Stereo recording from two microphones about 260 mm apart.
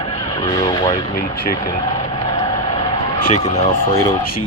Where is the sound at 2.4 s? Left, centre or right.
Left.